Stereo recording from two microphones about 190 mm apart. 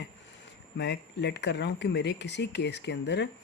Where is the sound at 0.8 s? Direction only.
65° left (ahead or behind).